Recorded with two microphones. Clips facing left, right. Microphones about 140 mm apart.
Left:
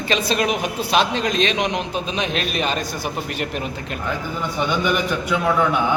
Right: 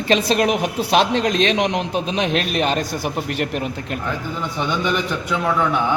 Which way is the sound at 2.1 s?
60° right (ahead or behind).